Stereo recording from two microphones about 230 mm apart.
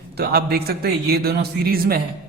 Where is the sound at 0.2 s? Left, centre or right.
Right.